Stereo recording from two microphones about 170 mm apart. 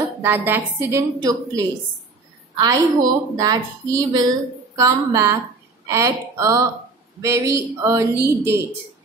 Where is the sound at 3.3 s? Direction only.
20° right (ahead or behind).